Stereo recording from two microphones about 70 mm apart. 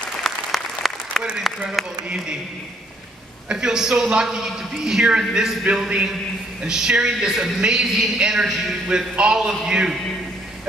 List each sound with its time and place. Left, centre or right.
0.2 s applause: centre
1.5 s a man's voice: centre
2.0 s a woman's voice: centre
3.4 s a woman's voice: centre